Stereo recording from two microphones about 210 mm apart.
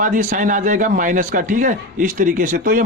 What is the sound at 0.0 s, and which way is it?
Speech, 40° right (ahead or behind).